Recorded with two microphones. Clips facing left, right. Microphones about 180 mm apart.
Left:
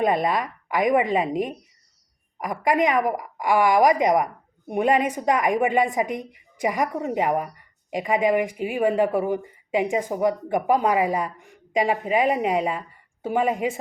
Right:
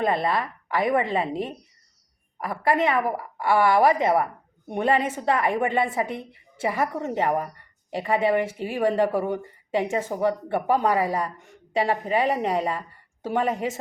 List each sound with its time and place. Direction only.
0.0 s a woman's voice: 15° left (ahead or behind)